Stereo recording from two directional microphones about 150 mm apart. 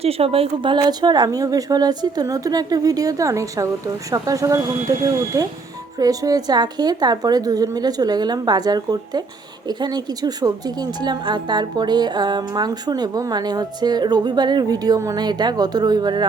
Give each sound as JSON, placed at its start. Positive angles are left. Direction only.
{"t": 0.0, "sound": "a woman's voice", "side_deg": -40}